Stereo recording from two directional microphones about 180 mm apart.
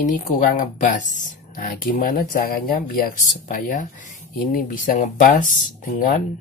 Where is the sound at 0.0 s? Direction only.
40° left (ahead or behind).